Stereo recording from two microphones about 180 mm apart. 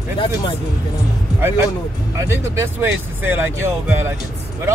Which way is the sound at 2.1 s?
15° right (ahead or behind).